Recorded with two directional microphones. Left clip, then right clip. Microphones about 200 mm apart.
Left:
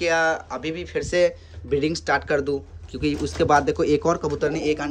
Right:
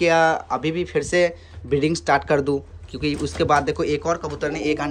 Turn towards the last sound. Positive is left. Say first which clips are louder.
# even
turn(degrees=15)  # may be behind; listen again after turning